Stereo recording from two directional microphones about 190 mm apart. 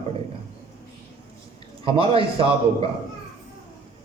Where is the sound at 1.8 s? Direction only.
30° right (ahead or behind).